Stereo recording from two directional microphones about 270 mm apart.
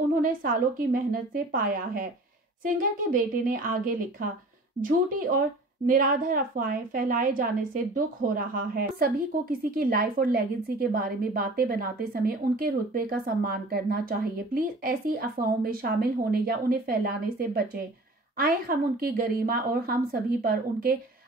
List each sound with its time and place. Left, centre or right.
0.2 s a woman's voice: right
5.9 s a woman's voice: right